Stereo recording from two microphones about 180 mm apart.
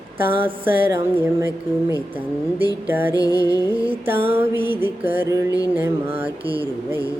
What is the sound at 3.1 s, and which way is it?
Music, 20° left (ahead or behind).